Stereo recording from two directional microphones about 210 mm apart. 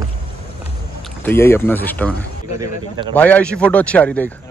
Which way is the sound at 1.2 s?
10° left (ahead or behind).